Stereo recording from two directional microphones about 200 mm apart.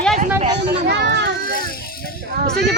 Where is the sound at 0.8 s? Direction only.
55° right (ahead or behind).